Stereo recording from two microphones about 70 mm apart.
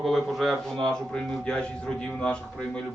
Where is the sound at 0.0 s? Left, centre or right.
Centre.